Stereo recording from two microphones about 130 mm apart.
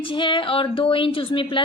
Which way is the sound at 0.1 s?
40° left (ahead or behind).